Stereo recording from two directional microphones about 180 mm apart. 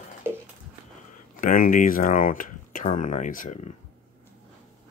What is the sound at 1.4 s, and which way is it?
Speech, 50° left (ahead or behind).